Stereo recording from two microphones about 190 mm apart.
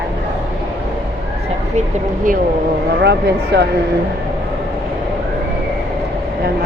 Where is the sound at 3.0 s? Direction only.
60° right (ahead or behind).